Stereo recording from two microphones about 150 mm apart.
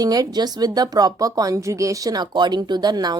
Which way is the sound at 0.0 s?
25° right (ahead or behind).